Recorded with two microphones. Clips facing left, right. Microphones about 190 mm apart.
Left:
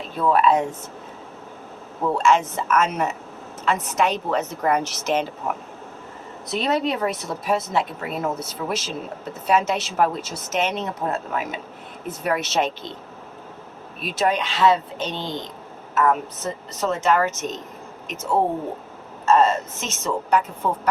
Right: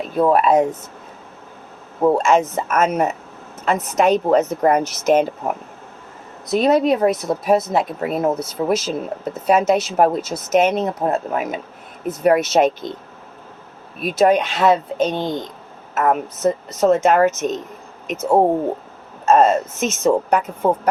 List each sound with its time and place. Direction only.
0.2 s speech: 45° right (ahead or behind)
2.0 s a woman's voice: 40° right (ahead or behind)
6.6 s a woman's voice: 45° right (ahead or behind)
14.0 s a woman's voice: 45° right (ahead or behind)